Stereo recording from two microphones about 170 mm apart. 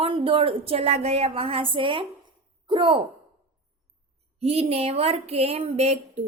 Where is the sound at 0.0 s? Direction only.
30° right (ahead or behind).